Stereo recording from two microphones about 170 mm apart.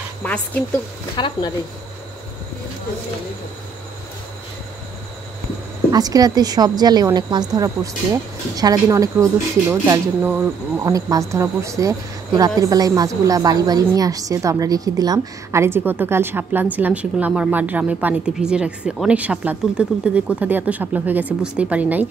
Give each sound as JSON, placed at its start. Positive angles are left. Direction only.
{"t": 1.1, "sound": "speech", "side_deg": 30}
{"t": 5.9, "sound": "a woman's voice", "side_deg": -20}